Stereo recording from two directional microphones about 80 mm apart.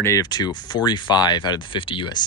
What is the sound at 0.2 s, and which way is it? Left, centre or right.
Speech, left.